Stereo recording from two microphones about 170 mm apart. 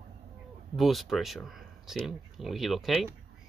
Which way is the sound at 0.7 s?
Centre (ahead or behind).